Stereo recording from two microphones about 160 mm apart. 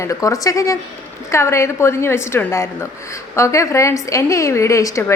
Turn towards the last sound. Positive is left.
turn(degrees=20)  # may be behind; listen again after turning